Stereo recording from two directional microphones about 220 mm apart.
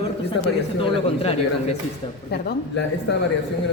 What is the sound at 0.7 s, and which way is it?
Speech, 25° left (ahead or behind).